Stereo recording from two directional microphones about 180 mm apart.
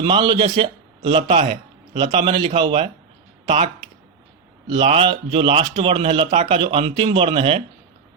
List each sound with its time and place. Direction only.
0.0 s speech: 25° right (ahead or behind)
4.7 s speech: 30° right (ahead or behind)